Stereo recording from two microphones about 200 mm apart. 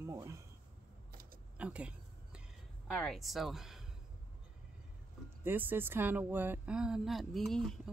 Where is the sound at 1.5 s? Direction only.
5° right (ahead or behind).